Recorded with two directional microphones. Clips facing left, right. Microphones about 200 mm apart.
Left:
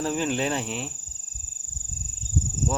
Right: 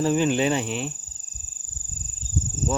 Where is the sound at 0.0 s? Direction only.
Centre (ahead or behind).